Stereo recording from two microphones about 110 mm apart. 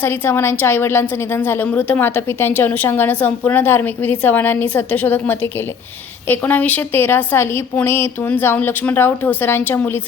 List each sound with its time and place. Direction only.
0.0 s a woman's voice: 20° left (ahead or behind)